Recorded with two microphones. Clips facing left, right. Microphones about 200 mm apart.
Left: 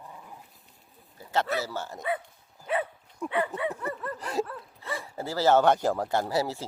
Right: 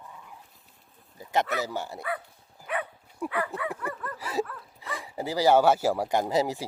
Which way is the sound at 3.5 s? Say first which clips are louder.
Left 2 dB; 25° left (ahead or behind).